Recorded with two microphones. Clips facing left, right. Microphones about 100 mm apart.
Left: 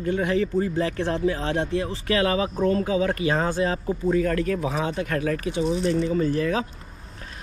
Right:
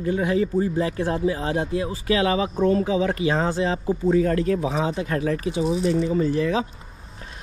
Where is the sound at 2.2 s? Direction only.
25° right (ahead or behind).